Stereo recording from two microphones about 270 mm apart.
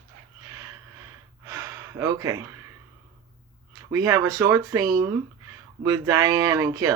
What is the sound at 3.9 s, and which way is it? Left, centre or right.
Speech, centre.